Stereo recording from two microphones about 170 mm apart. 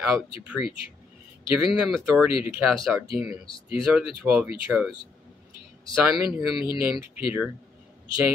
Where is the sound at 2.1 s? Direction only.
10° right (ahead or behind).